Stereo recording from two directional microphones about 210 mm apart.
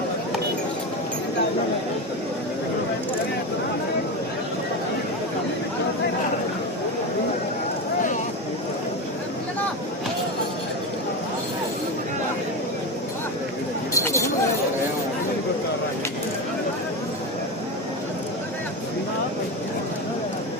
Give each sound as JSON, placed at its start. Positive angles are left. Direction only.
{"t": 13.9, "sound": "chatter", "side_deg": 15}